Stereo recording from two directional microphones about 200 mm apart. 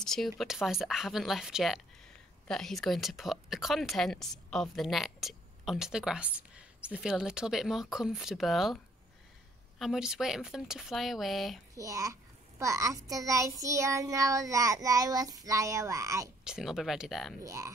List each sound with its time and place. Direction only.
0.0 s speech: centre (ahead or behind)
9.8 s speech: centre (ahead or behind)
11.7 s a child's voice: 15° right (ahead or behind)
16.4 s speech: 5° right (ahead or behind)
17.4 s a child's voice: 15° right (ahead or behind)